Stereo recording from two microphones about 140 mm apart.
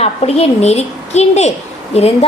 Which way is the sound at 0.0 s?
45° left (ahead or behind).